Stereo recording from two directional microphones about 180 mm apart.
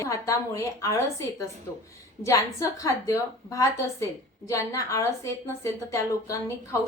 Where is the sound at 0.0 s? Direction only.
15° left (ahead or behind).